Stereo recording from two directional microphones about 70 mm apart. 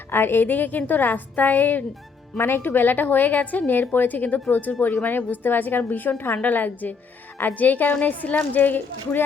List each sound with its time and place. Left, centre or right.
0.1 s a woman's voice: left